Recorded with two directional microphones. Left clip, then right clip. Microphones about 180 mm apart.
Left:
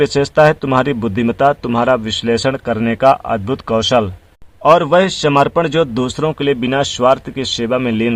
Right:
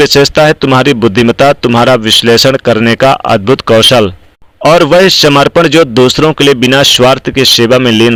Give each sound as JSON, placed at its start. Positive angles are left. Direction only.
{"t": 0.0, "sound": "speech", "side_deg": -25}